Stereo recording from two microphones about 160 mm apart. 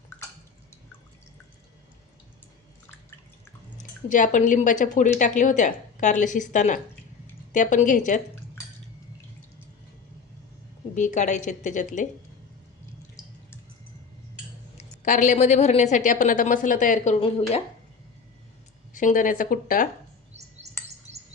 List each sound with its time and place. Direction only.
4.1 s a woman's voice: 50° left (ahead or behind)
10.9 s a woman's voice: 50° left (ahead or behind)
14.8 s a woman's voice: 50° left (ahead or behind)
18.9 s speech: 55° left (ahead or behind)
21.1 s bird: 15° right (ahead or behind)